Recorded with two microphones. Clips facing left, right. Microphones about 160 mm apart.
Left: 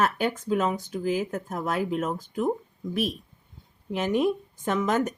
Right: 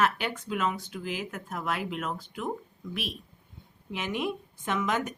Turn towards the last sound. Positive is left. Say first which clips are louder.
# left 5 dB
turn(degrees=40)  # may be behind; listen again after turning